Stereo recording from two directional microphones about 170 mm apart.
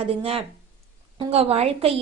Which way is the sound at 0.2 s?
35° right (ahead or behind).